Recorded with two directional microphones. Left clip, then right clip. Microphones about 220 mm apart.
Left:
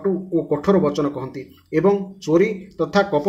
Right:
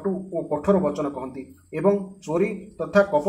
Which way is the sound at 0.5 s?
40° left (ahead or behind).